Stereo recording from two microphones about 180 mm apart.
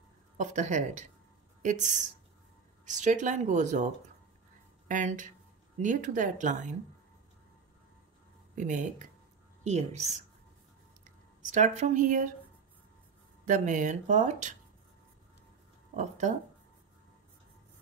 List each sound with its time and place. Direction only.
0.4 s speech: 45° right (ahead or behind)
8.5 s speech: 45° right (ahead or behind)
11.5 s speech: 40° right (ahead or behind)
13.5 s speech: 45° right (ahead or behind)
16.0 s speech: 45° right (ahead or behind)